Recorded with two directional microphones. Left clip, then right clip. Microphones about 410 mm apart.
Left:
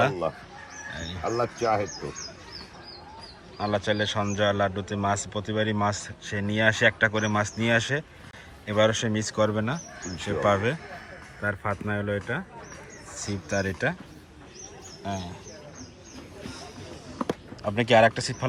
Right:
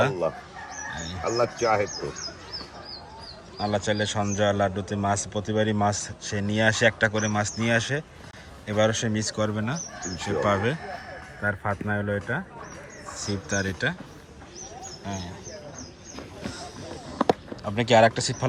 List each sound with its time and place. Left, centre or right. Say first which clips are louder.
1.2 s speech: right 2 dB; left
3.6 s speech: even; centre
15.0 s speech: left 3 dB; centre
16.5 s vehicle: right 3 dB; centre
17.6 s speech: even; centre